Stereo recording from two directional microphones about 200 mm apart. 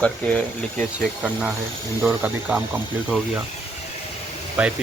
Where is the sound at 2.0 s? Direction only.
5° right (ahead or behind).